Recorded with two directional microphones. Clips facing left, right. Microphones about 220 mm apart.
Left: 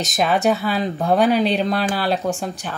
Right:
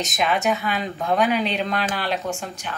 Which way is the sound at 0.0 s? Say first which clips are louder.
Left 4 dB; 35° left (ahead or behind).